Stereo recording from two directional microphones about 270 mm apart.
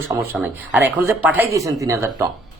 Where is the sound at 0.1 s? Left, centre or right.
Centre.